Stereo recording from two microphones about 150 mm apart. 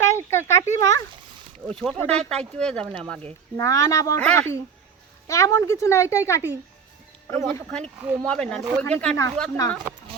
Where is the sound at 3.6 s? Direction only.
20° left (ahead or behind).